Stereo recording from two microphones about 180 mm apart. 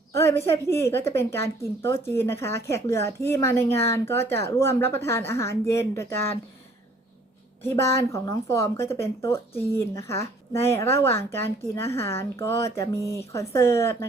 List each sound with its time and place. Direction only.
0.1 s a woman's voice: 15° left (ahead or behind)
7.6 s a woman's voice: 15° left (ahead or behind)